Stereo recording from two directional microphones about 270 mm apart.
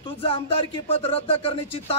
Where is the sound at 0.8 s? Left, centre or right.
Left.